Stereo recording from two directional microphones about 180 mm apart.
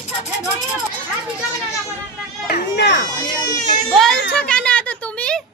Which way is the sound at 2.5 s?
70° left (ahead or behind).